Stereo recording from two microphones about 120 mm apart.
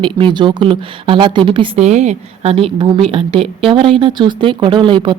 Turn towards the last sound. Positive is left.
turn(degrees=-45)  # may be behind; listen again after turning